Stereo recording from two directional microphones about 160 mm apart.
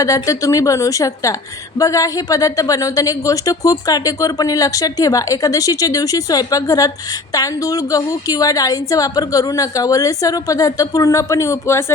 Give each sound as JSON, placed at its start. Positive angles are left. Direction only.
{"t": 0.0, "sound": "a woman's voice", "side_deg": 20}